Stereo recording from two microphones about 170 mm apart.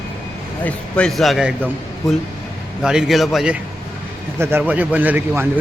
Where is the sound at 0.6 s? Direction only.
5° left (ahead or behind).